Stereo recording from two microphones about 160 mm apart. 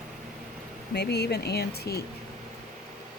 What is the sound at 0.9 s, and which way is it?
Speech, 90° left.